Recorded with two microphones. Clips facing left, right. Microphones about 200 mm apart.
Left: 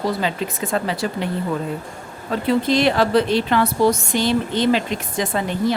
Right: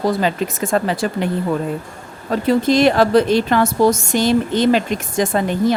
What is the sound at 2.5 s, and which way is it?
A woman's voice, 45° right (ahead or behind).